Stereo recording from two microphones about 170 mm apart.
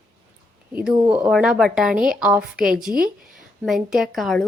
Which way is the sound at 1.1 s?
5° right (ahead or behind).